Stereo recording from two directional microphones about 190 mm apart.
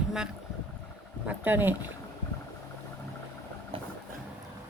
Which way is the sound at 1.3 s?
10° right (ahead or behind).